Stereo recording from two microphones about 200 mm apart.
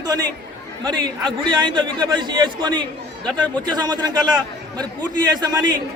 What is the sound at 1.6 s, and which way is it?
A man's voice, 20° right (ahead or behind).